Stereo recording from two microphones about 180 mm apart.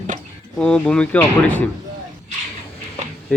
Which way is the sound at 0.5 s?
5° left (ahead or behind).